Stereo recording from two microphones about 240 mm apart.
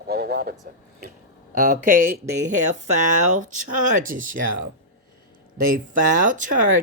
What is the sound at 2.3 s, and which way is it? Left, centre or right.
Speech, right.